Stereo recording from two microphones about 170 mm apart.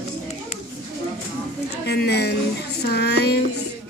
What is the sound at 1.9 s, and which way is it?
A woman's voice, 75° left (ahead or behind).